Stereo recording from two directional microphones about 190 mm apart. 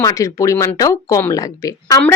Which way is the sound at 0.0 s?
15° left (ahead or behind).